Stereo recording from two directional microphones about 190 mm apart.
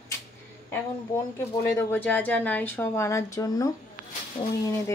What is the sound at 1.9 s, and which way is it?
Speech, 10° left (ahead or behind).